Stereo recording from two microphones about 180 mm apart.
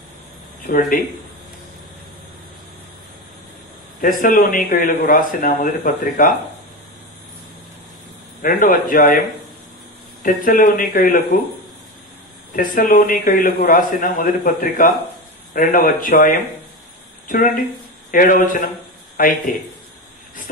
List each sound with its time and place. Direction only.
0.7 s speech: 50° left (ahead or behind)
4.0 s speech: 50° left (ahead or behind)
8.4 s speech: 50° left (ahead or behind)
10.2 s speech: 50° left (ahead or behind)
12.5 s speech: 45° left (ahead or behind)
18.1 s a man's voice: 50° left (ahead or behind)